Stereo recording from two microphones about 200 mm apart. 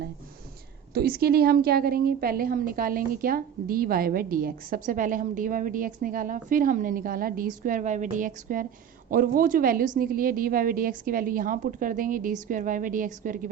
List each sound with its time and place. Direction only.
0.9 s a woman's voice: 50° right (ahead or behind)